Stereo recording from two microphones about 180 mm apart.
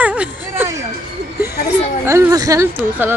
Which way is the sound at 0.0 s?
5° right (ahead or behind).